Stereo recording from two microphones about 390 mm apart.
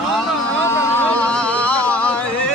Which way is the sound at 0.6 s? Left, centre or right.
Centre.